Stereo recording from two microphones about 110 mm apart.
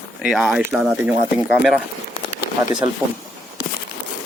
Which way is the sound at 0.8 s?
15° right (ahead or behind).